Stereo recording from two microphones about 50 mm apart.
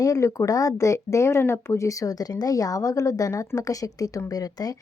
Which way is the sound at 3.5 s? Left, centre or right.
Left.